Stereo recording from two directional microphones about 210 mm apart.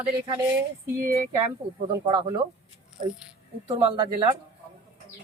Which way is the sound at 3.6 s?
20° right (ahead or behind).